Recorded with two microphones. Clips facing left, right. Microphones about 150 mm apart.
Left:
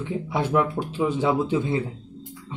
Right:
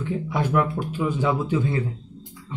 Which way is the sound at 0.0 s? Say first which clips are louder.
Even; 25° left (ahead or behind).